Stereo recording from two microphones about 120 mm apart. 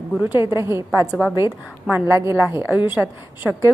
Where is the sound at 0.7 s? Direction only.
20° right (ahead or behind).